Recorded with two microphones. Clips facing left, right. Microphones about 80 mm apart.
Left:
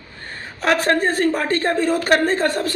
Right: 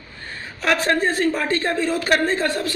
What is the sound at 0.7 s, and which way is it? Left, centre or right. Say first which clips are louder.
A woman's voice: left 2 dB; left.